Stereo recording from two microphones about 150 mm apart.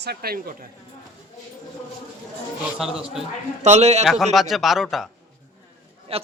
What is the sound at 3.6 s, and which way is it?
Speech, 45° right (ahead or behind).